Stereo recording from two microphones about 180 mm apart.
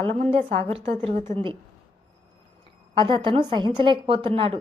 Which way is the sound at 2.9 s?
25° right (ahead or behind).